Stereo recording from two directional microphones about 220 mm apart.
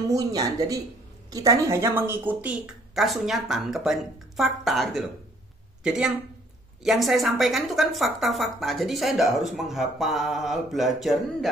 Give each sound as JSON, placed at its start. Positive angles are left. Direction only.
{"t": 0.1, "sound": "a woman's voice", "side_deg": -15}